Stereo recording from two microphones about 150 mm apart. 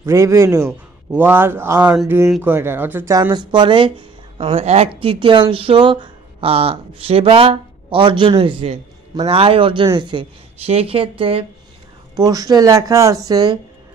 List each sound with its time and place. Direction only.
0.0 s a man's voice: 20° right (ahead or behind)
3.2 s speech: 30° right (ahead or behind)
12.3 s speech: 25° right (ahead or behind)